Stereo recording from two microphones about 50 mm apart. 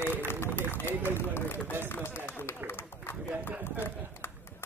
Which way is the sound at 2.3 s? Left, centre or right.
Left.